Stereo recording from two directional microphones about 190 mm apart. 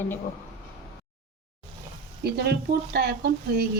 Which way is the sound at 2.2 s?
55° right (ahead or behind).